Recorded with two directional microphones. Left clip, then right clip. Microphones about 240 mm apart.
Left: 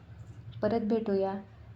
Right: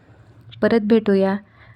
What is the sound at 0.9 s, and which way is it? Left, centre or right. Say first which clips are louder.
Speech: right 12 dB; right.